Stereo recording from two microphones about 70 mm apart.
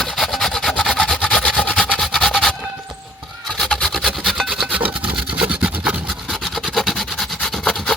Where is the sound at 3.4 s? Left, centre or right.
Centre.